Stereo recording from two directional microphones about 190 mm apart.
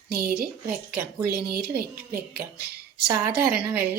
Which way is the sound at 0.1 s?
50° right (ahead or behind).